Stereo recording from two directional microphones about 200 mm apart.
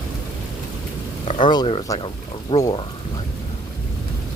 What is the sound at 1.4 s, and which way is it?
Speech, 20° left (ahead or behind).